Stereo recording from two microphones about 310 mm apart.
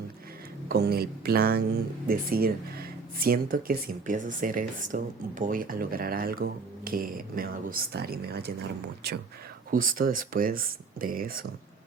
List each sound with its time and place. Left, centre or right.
0.7 s speech: right
9.7 s speech: right